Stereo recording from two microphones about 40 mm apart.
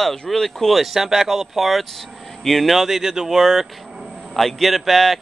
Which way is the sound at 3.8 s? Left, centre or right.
Centre.